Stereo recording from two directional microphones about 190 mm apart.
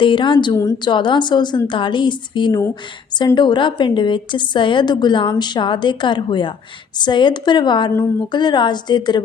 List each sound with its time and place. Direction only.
0.0 s a woman's voice: 25° left (ahead or behind)